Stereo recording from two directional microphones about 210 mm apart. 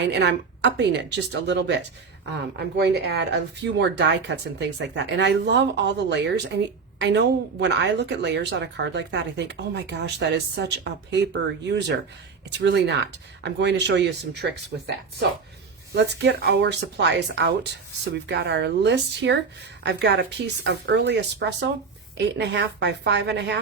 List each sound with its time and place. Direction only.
0.0 s speech: 55° right (ahead or behind)